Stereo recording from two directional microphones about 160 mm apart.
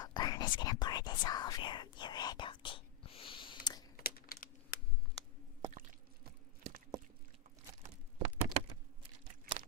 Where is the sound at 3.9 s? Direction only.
65° left (ahead or behind).